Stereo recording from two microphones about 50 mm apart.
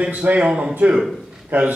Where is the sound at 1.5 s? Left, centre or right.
Right.